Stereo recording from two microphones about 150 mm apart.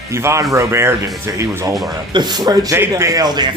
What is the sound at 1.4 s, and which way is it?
Speech, 20° right (ahead or behind).